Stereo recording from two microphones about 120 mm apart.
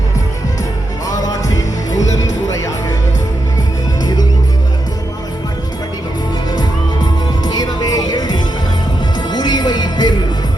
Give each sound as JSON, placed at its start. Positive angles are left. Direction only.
{"t": 1.0, "sound": "music", "side_deg": 30}
{"t": 7.4, "sound": "music", "side_deg": 35}